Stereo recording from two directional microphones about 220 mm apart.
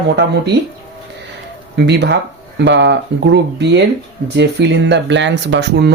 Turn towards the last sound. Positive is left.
turn(degrees=-50)  # may be behind; listen again after turning